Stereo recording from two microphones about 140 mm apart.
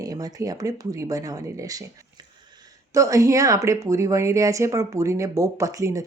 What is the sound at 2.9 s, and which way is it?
Speech, 20° right (ahead or behind).